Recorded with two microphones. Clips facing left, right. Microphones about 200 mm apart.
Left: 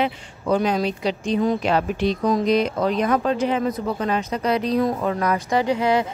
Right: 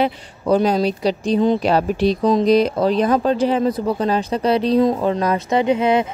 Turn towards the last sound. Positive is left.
turn(degrees=-20)  # may be behind; listen again after turning